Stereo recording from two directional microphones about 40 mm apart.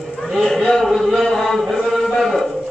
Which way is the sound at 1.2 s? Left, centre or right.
Centre.